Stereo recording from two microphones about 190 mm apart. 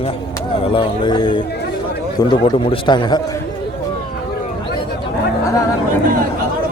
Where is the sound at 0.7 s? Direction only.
25° left (ahead or behind).